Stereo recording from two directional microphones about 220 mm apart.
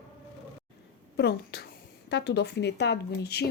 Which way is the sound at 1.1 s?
50° left (ahead or behind).